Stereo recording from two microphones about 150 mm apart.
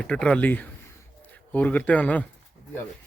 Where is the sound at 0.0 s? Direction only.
5° left (ahead or behind).